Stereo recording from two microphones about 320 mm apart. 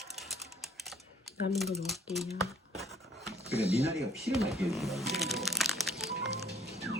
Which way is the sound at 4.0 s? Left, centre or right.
Centre.